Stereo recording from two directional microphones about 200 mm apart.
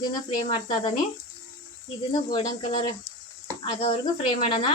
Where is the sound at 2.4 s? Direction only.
35° left (ahead or behind).